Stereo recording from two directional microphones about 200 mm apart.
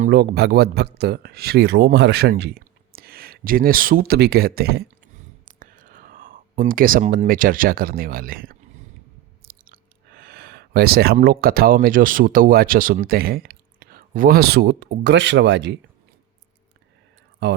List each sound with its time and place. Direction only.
0.0 s speech: 50° right (ahead or behind)
17.4 s speech: 55° right (ahead or behind)